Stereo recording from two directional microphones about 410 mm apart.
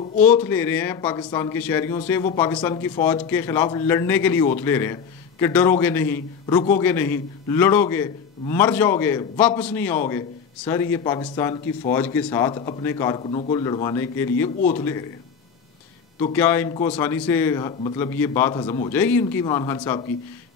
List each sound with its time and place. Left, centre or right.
0.2 s a man's voice: centre
14.6 s a man's voice: centre
16.2 s a man's voice: centre